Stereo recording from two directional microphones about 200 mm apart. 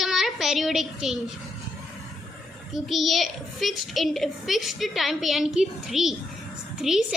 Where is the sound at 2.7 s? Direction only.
Centre (ahead or behind).